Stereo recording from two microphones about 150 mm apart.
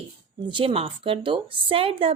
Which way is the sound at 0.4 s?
35° right (ahead or behind).